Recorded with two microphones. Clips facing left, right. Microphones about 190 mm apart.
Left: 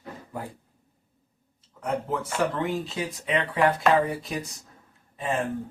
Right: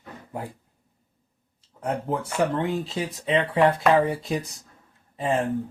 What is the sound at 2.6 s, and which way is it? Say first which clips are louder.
Speech: right 2 dB; 30° right (ahead or behind).